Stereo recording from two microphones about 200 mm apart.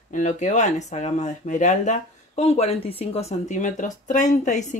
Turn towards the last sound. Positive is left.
turn(degrees=40)  # may be behind; listen again after turning